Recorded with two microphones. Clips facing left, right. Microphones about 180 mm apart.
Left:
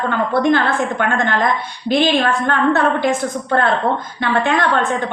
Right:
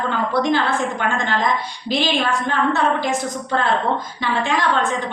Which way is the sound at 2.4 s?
55° left (ahead or behind).